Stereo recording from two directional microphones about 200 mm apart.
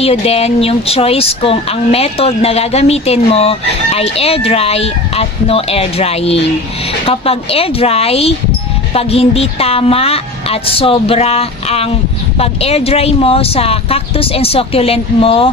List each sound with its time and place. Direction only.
0.0 s speech: 30° left (ahead or behind)